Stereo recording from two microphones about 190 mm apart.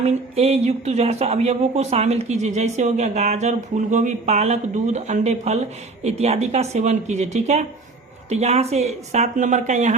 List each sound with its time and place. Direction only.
0.0 s speech: 35° right (ahead or behind)